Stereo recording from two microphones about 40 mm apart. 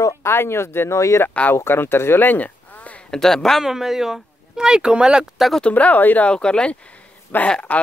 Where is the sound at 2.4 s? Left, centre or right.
Left.